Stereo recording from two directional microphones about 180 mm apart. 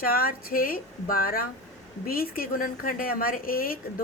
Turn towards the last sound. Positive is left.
turn(degrees=55)  # may be behind; listen again after turning